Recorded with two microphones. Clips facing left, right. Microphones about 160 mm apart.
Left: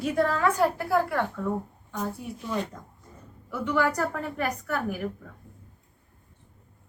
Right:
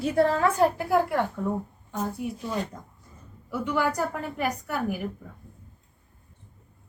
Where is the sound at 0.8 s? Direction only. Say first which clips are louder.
Right 2 dB; 15° right (ahead or behind).